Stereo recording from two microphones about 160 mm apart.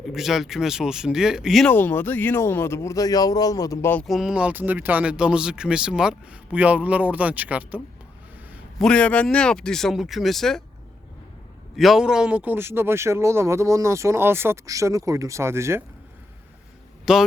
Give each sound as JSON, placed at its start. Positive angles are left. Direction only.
{"t": 0.0, "sound": "speech", "side_deg": 0}
{"t": 1.7, "sound": "speech", "side_deg": 10}
{"t": 4.0, "sound": "speech", "side_deg": 0}
{"t": 8.8, "sound": "speech", "side_deg": 5}
{"t": 11.8, "sound": "speech", "side_deg": 0}
{"t": 17.1, "sound": "speech", "side_deg": -5}